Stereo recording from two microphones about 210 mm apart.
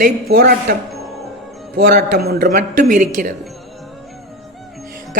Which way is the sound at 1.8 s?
45° right (ahead or behind).